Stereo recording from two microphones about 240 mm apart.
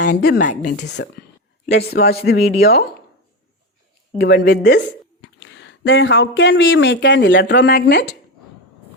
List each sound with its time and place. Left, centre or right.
0.0 s speech: left
4.2 s speech: left